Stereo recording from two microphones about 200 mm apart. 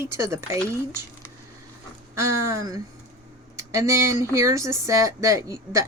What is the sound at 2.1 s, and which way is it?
Speech, 15° right (ahead or behind).